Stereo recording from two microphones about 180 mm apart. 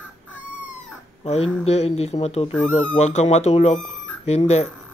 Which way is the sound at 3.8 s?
40° left (ahead or behind).